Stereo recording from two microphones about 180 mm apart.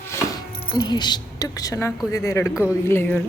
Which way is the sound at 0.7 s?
25° left (ahead or behind).